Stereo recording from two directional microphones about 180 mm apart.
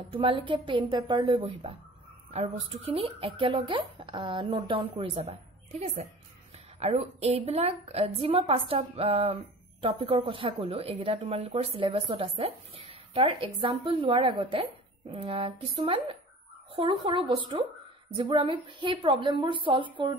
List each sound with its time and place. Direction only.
0.1 s a woman's voice: 30° right (ahead or behind)